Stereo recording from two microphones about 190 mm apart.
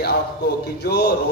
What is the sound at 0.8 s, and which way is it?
Speech, 60° left (ahead or behind).